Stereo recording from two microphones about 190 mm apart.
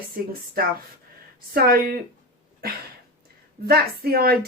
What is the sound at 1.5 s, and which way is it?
A woman's voice, 50° right (ahead or behind).